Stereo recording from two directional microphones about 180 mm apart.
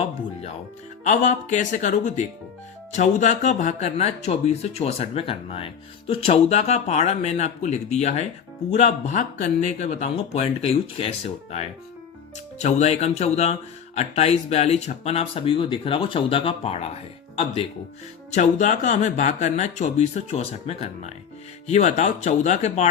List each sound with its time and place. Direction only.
1.0 s speech: 45° left (ahead or behind)
12.5 s speech: 40° left (ahead or behind)